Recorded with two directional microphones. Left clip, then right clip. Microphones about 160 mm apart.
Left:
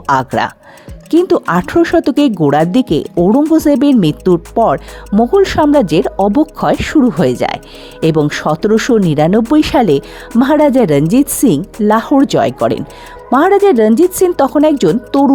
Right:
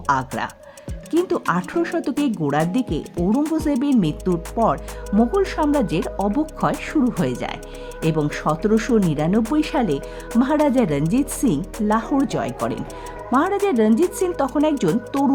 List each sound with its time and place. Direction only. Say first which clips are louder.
0.0 s speech: left 9 dB; 50° left (ahead or behind)